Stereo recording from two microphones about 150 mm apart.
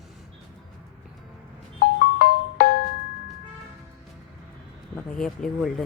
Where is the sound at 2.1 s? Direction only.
85° left.